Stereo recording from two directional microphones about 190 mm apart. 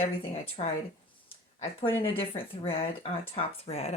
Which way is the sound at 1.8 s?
30° left (ahead or behind).